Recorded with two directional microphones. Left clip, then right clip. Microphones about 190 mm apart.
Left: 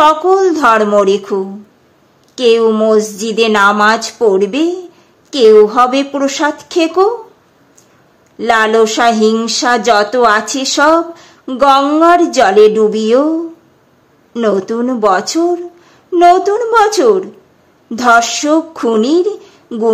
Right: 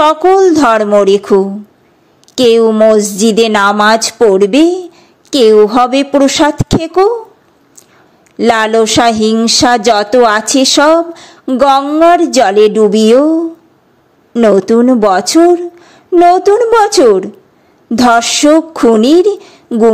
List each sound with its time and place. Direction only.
0.0 s a woman's voice: 30° right (ahead or behind)
8.4 s speech: 35° right (ahead or behind)
14.4 s speech: 30° right (ahead or behind)